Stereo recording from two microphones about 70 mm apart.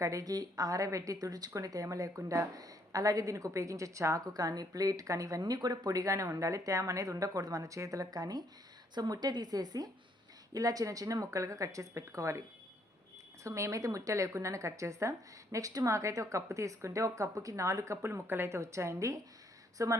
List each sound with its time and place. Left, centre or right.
0.0 s speech: right
4.4 s speech: right
5.4 s a woman's voice: right